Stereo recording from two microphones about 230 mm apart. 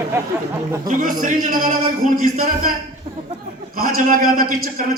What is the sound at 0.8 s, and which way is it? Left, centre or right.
A man's voice, right.